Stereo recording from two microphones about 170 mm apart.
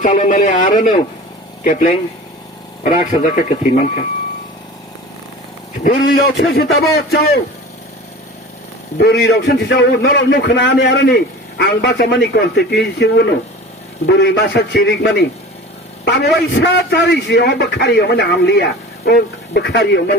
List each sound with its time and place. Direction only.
0.0 s speech: 50° left (ahead or behind)
5.8 s a man's voice: 55° left (ahead or behind)
9.0 s a man's voice: 80° left